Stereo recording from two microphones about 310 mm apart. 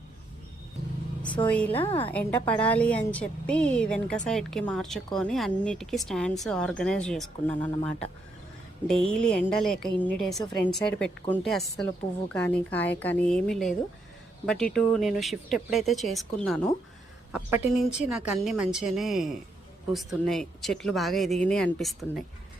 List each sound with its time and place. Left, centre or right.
1.2 s a woman's voice: centre
1.9 s a woman's voice: centre
2.1 s a woman's voice: centre